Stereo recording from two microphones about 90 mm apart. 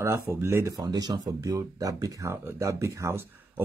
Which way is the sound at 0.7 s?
50° right (ahead or behind).